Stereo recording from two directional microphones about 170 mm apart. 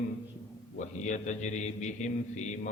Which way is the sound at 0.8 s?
45° left (ahead or behind).